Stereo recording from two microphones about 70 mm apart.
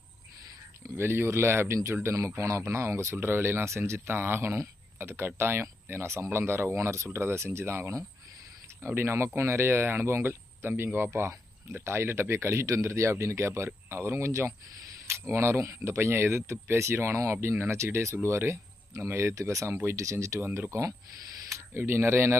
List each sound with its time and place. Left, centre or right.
0.9 s speech: right
19.7 s speech: right
20.0 s speech: right